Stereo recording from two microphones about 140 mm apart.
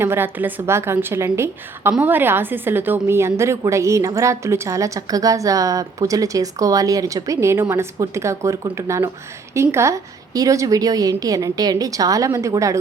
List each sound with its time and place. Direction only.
0.0 s a woman's voice: 15° right (ahead or behind)